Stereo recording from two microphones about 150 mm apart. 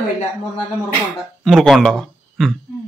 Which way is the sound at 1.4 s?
Centre (ahead or behind).